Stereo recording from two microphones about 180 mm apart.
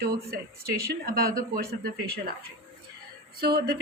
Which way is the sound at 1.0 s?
55° right (ahead or behind).